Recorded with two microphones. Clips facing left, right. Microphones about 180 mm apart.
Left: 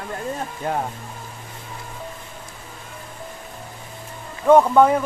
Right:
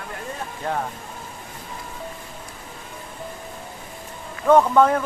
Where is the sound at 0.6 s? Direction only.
5° left (ahead or behind).